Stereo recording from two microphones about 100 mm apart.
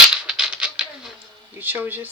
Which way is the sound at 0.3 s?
5° right (ahead or behind).